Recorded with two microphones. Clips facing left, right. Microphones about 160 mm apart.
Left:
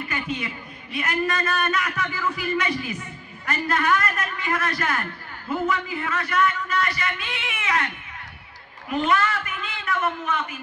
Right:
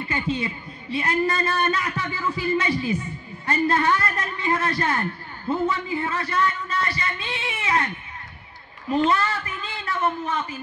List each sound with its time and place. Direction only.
0.0 s a man's voice: 25° right (ahead or behind)